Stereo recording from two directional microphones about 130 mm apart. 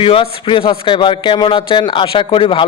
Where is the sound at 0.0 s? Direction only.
45° left (ahead or behind).